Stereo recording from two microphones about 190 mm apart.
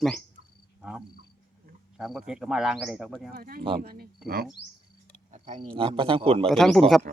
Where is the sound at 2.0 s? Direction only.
Centre (ahead or behind).